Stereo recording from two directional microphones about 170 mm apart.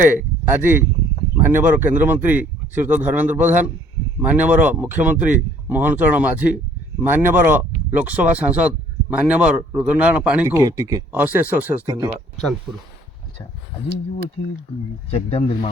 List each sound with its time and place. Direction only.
0.0 s speech: 10° right (ahead or behind)
11.1 s speech: 10° right (ahead or behind)
15.1 s speech: 35° left (ahead or behind)